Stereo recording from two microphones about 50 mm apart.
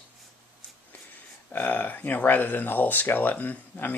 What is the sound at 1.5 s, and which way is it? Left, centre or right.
Speech, left.